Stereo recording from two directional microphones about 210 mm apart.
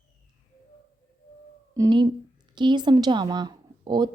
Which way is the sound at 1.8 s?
20° right (ahead or behind).